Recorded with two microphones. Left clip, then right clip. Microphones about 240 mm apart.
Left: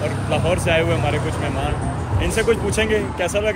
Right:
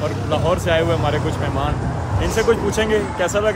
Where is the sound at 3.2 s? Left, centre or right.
Centre.